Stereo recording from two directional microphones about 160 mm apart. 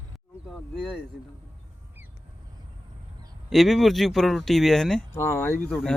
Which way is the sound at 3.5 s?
Centre (ahead or behind).